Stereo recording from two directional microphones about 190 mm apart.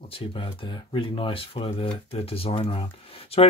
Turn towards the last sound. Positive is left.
turn(degrees=30)  # may be behind; listen again after turning